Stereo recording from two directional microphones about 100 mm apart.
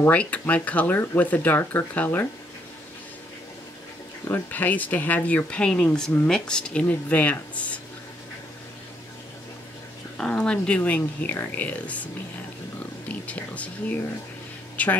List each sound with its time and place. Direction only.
0.0 s speech: 15° left (ahead or behind)
4.2 s speech: 20° left (ahead or behind)
10.1 s speech: 10° left (ahead or behind)
13.1 s speech: 15° left (ahead or behind)